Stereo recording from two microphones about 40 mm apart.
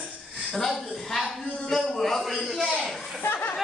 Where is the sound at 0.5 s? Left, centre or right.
Centre.